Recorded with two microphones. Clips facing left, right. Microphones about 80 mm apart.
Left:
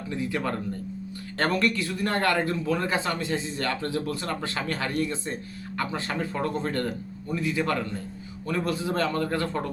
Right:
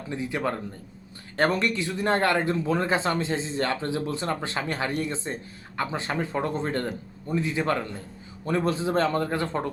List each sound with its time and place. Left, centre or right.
0.1 s speech: right